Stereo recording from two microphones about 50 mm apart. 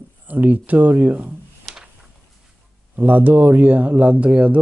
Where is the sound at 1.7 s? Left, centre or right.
Centre.